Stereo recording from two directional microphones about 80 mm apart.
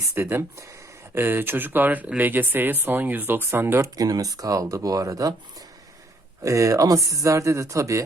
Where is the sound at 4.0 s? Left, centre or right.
Right.